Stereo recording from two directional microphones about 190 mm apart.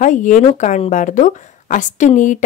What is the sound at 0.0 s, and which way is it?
A woman's voice, 40° left (ahead or behind).